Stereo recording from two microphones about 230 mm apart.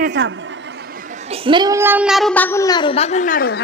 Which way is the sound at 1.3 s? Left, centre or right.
Right.